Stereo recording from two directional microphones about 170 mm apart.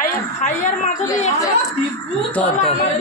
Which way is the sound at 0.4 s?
50° left (ahead or behind).